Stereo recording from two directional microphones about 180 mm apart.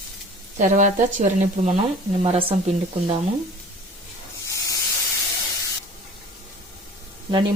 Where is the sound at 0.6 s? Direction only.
45° right (ahead or behind).